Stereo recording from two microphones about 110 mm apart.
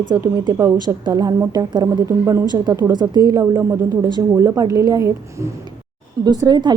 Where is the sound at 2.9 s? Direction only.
40° right (ahead or behind).